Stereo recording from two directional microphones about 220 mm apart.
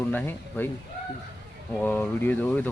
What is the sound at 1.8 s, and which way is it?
Speech, 5° left (ahead or behind).